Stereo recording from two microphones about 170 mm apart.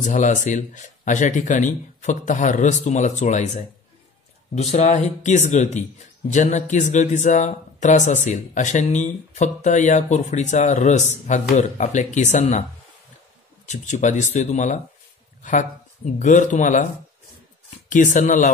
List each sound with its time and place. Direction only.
0.0 s speech: 45° left (ahead or behind)
13.7 s speech: 45° left (ahead or behind)